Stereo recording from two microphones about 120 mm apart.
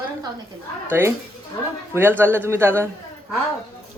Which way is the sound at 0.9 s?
20° right (ahead or behind).